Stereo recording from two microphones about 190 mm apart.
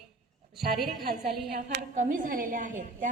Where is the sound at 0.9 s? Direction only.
55° right (ahead or behind).